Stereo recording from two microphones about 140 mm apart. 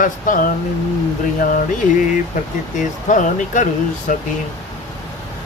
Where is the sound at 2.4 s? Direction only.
65° left (ahead or behind).